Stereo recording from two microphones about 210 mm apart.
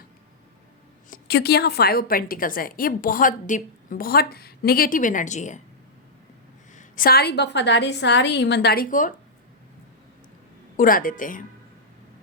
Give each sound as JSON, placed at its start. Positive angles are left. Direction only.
{"t": 1.1, "sound": "a woman's voice", "side_deg": 50}
{"t": 6.7, "sound": "a woman's voice", "side_deg": 40}
{"t": 10.8, "sound": "a woman's voice", "side_deg": 40}